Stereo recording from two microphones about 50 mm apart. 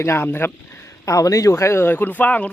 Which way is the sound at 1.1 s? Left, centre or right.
Left.